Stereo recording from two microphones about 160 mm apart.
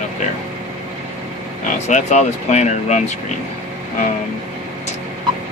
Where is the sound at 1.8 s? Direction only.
45° left (ahead or behind).